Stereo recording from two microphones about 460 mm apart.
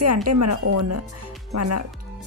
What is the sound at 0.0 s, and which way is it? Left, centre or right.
Speech, right.